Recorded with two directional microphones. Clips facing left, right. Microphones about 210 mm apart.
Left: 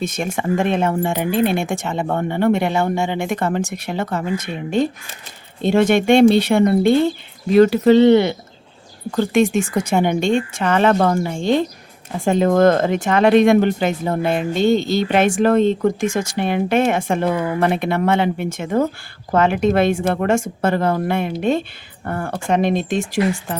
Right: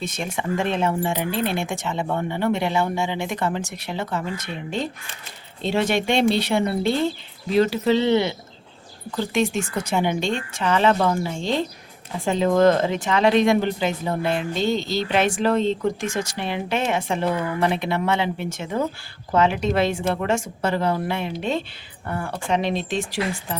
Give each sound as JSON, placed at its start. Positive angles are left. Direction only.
{"t": 0.0, "sound": "speech", "side_deg": 45}